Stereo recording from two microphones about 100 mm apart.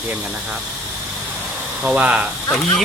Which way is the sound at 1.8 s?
10° right (ahead or behind).